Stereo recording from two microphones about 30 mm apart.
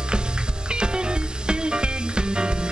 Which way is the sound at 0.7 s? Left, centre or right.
Right.